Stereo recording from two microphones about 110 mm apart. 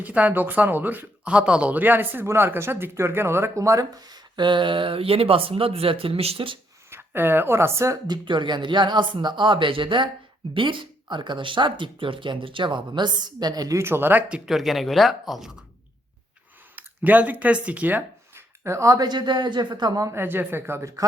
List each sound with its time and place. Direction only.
0.0 s speech: 15° right (ahead or behind); by 6.6 s 55° right (ahead or behind)
6.9 s speech: 20° right (ahead or behind)
8.0 s speech: 45° right (ahead or behind); by 15.6 s 5° right (ahead or behind)
16.7 s speech: 15° right (ahead or behind)